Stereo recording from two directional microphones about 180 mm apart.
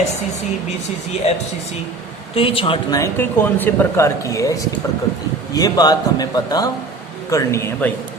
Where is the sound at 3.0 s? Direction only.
10° left (ahead or behind).